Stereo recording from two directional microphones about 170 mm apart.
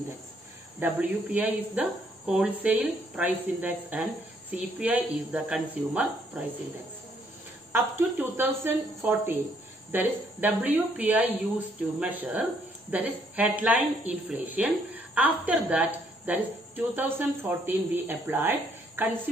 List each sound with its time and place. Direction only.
0.7 s speech: 10° right (ahead or behind)
7.7 s speech: 15° right (ahead or behind)